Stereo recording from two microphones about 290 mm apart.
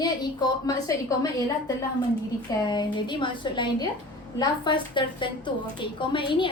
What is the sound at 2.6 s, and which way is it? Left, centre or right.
A woman's voice, centre.